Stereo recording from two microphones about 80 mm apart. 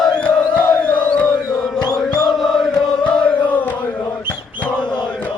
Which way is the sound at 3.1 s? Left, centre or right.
Centre.